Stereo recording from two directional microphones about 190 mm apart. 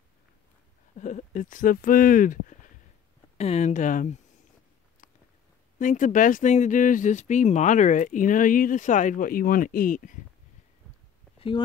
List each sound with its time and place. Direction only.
0.9 s speech: 40° left (ahead or behind)
5.8 s speech: 40° left (ahead or behind)
11.3 s a sound: 25° left (ahead or behind)